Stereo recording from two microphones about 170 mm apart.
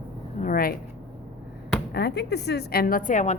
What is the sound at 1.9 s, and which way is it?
A woman's voice, 70° left (ahead or behind).